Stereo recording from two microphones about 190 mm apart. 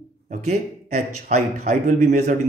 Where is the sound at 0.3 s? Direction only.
40° right (ahead or behind).